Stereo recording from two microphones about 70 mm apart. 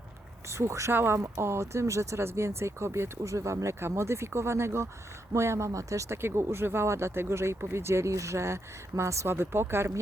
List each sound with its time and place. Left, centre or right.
0.4 s speech: right